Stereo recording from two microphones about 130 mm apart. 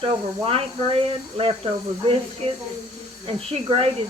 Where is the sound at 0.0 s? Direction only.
45° right (ahead or behind).